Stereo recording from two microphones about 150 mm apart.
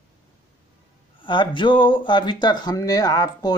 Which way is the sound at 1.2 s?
35° left (ahead or behind).